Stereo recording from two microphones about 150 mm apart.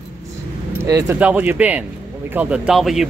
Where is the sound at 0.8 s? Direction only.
25° right (ahead or behind).